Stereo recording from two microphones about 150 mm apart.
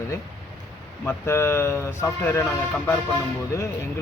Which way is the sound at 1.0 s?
20° left (ahead or behind).